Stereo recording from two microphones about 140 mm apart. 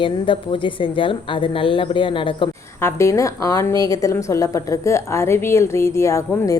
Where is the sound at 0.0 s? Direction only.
35° left (ahead or behind).